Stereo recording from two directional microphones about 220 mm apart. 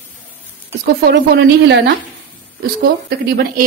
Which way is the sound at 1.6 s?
50° right (ahead or behind).